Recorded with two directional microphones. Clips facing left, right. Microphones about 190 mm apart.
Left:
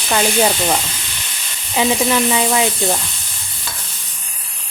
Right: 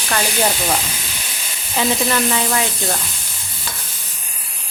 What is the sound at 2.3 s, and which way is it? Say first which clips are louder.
Speech: left 4 dB; 15° left (ahead or behind).